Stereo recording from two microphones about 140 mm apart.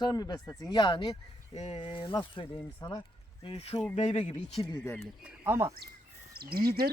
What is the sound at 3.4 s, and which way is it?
Speech, 45° left (ahead or behind).